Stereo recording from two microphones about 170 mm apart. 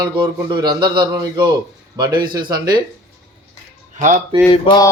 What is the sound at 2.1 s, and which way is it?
Speech, 60° right (ahead or behind).